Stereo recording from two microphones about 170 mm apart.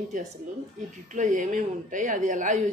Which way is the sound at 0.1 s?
50° right (ahead or behind).